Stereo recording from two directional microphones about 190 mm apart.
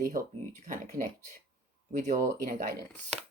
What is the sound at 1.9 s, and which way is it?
Speech, 40° right (ahead or behind).